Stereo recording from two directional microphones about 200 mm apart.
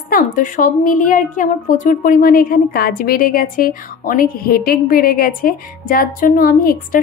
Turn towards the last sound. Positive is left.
turn(degrees=45)  # may be behind; listen again after turning